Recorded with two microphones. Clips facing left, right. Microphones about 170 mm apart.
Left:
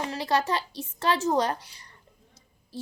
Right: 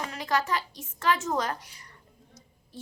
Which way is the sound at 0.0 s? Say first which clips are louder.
Left 3 dB; 30° left (ahead or behind).